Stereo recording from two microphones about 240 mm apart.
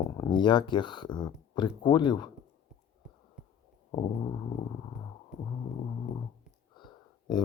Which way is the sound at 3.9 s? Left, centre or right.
Left.